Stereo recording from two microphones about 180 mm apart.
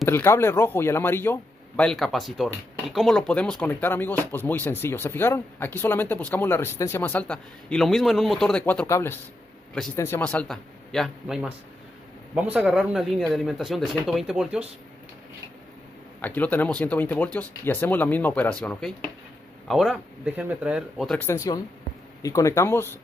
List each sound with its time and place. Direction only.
0.0 s a man's voice: 15° left (ahead or behind); by 14.6 s 5° right (ahead or behind)
16.2 s a man's voice: 10° left (ahead or behind)
21.2 s a man's voice: 15° left (ahead or behind)